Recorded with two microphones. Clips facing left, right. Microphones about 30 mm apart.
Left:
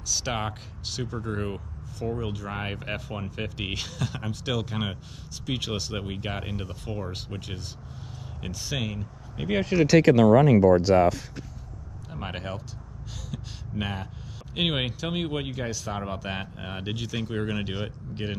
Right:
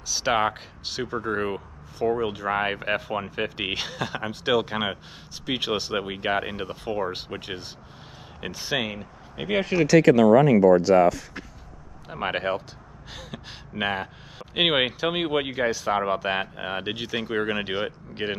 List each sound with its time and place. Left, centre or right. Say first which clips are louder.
0.1 s speech: right 7 dB; centre
9.5 s speech: right 1 dB; centre
12.1 s speech: right 9 dB; right